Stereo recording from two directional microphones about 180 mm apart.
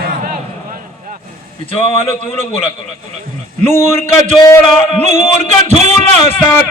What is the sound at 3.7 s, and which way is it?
A man's voice, 40° right (ahead or behind).